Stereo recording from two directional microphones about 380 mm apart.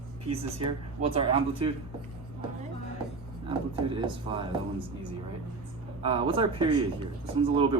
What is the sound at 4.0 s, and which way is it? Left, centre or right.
Speech, centre.